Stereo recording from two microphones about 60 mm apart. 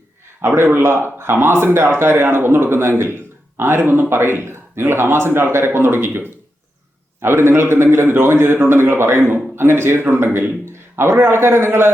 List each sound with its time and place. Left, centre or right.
0.4 s a man's voice: right
10.2 s a man's voice: right
10.7 s a man's voice: right